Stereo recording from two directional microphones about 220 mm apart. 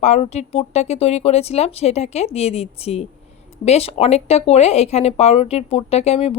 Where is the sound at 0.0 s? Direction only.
30° left (ahead or behind).